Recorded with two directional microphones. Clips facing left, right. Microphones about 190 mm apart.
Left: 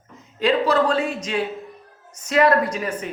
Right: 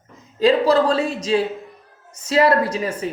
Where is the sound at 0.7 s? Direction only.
35° right (ahead or behind).